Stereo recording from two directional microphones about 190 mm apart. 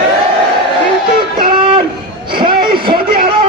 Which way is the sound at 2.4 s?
25° right (ahead or behind).